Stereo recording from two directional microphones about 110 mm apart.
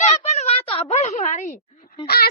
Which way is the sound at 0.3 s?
80° left.